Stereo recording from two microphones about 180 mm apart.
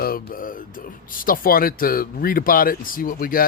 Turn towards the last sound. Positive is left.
turn(degrees=55)  # may be behind; listen again after turning